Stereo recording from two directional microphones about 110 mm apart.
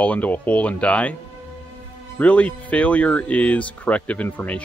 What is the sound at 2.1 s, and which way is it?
Speech, 15° left (ahead or behind).